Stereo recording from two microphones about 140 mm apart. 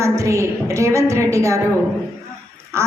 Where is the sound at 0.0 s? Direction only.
20° right (ahead or behind).